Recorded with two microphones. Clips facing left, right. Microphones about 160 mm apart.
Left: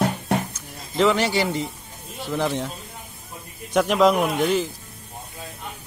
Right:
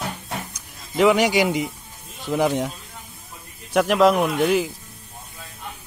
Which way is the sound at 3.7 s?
Centre (ahead or behind).